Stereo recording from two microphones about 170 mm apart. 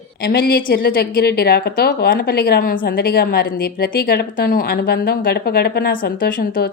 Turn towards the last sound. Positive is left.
turn(degrees=55)  # may be behind; listen again after turning